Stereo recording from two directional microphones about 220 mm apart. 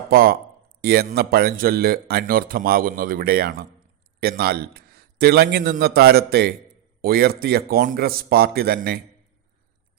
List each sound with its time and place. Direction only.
0.1 s speech: 40° right (ahead or behind)